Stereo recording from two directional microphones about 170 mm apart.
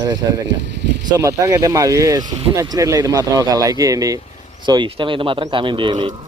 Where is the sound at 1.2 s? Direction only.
15° right (ahead or behind).